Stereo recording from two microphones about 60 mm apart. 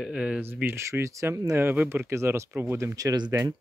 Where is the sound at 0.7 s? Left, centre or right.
Right.